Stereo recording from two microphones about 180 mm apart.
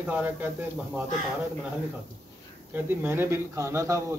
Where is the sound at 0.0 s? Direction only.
10° right (ahead or behind).